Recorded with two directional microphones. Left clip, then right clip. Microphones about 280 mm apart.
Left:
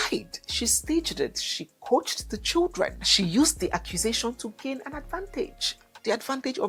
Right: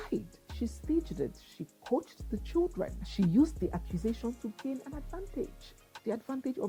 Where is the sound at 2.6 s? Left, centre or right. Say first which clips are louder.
Left 5 dB; left.